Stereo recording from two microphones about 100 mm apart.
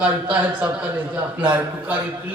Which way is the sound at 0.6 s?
15° right (ahead or behind).